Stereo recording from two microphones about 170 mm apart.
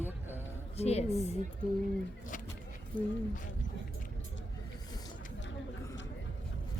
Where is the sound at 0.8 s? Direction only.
40° left (ahead or behind).